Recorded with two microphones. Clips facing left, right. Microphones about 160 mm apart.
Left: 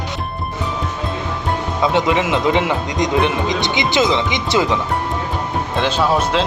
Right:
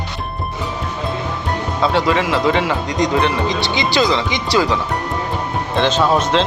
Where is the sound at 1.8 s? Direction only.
20° left (ahead or behind).